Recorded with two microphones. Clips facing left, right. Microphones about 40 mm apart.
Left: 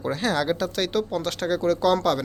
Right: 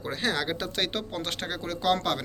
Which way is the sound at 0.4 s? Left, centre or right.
Right.